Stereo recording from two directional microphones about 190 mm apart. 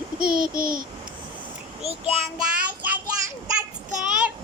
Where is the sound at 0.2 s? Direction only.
50° right (ahead or behind).